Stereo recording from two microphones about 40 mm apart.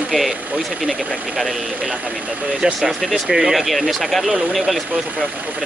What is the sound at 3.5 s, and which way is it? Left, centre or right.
Speech, centre.